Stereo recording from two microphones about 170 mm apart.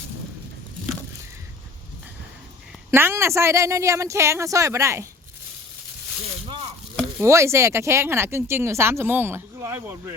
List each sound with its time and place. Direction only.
2.9 s speech: 15° right (ahead or behind)
7.2 s speech: 15° right (ahead or behind)